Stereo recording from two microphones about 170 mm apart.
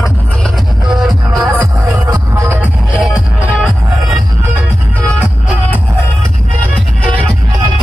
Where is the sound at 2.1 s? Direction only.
10° right (ahead or behind).